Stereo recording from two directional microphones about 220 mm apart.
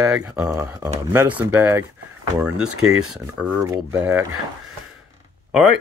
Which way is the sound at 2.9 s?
75° right (ahead or behind).